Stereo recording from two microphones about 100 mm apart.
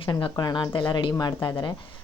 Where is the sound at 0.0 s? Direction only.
55° left (ahead or behind).